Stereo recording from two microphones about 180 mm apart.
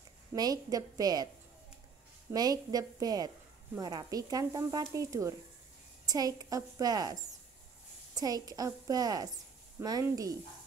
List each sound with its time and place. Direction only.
0.3 s speech: 20° right (ahead or behind)
2.3 s speech: 20° right (ahead or behind)